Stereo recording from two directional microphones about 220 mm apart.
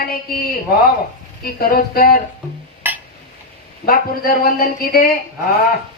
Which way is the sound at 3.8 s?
40° left (ahead or behind).